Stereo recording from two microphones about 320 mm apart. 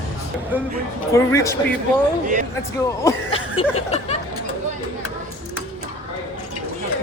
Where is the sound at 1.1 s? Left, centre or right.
Centre.